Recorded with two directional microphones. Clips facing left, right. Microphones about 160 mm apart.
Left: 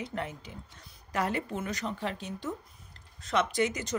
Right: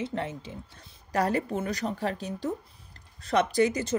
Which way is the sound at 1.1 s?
40° right (ahead or behind).